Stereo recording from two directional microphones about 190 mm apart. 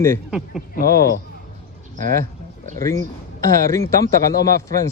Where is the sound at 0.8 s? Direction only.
55° left (ahead or behind).